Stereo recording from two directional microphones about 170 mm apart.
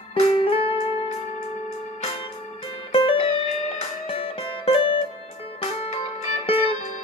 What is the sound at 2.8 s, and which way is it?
Music, 30° left (ahead or behind).